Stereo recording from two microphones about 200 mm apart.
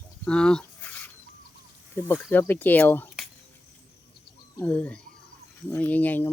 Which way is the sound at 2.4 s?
10° left (ahead or behind).